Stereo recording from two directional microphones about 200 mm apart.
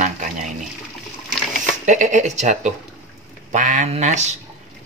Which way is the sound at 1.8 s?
40° right (ahead or behind).